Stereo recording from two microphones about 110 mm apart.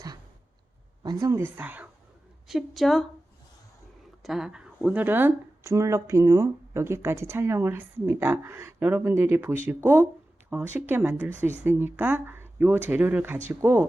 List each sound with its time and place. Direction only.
1.2 s speech: 25° right (ahead or behind)
2.5 s a woman's voice: centre (ahead or behind)
4.2 s speech: 5° right (ahead or behind)